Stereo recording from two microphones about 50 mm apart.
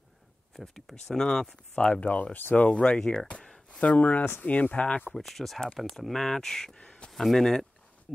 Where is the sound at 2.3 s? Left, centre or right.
Left.